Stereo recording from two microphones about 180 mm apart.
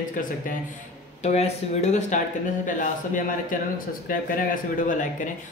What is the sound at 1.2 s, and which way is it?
Speech, 35° left (ahead or behind).